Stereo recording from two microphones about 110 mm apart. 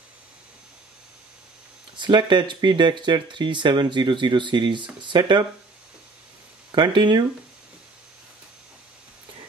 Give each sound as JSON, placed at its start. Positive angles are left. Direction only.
{"t": 2.0, "sound": "speech", "side_deg": -45}
{"t": 6.7, "sound": "speech", "side_deg": -45}